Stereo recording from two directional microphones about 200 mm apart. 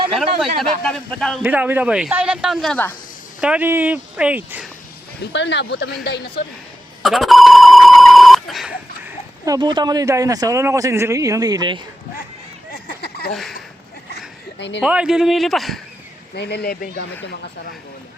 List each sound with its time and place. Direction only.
0.1 s a man's voice: centre (ahead or behind)
1.4 s a man's voice: 10° right (ahead or behind)
3.4 s speech: 5° right (ahead or behind)
5.2 s speech: 60° left (ahead or behind)
7.0 s speech: centre (ahead or behind)
9.0 s speech: 20° right (ahead or behind)
12.7 s a sound: 50° left (ahead or behind)
13.3 s a man's voice: centre (ahead or behind)
14.8 s a man's voice: 5° right (ahead or behind)
16.3 s speech: 55° left (ahead or behind)